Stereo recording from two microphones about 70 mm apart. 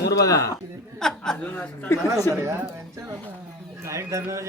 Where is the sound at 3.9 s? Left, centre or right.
Right.